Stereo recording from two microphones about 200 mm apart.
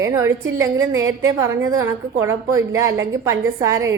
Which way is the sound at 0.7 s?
85° right.